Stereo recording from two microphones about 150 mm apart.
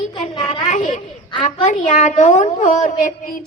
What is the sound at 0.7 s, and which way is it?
A child's voice, 60° left (ahead or behind).